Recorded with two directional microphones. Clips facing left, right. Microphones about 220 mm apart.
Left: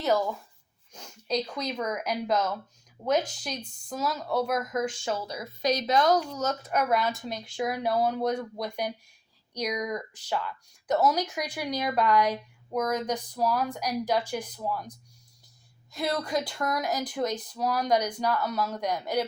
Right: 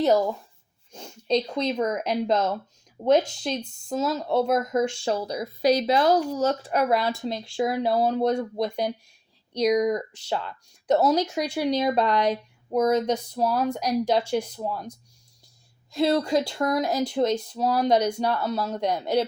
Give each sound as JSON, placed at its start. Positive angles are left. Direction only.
{"t": 0.0, "sound": "speech", "side_deg": -30}
{"t": 15.9, "sound": "speech", "side_deg": -25}